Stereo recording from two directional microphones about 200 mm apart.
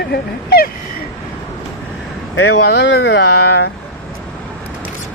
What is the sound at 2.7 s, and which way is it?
Speech, 55° left (ahead or behind).